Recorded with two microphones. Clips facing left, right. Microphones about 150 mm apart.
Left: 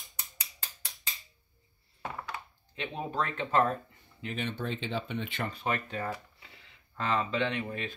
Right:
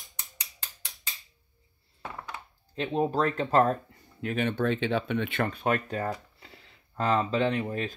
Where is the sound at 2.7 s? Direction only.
40° right (ahead or behind).